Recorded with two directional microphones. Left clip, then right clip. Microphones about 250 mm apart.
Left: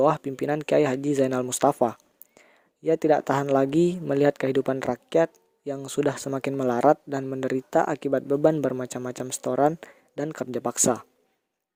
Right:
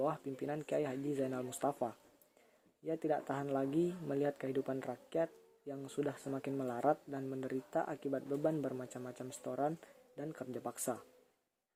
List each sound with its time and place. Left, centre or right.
0.0 s speech: left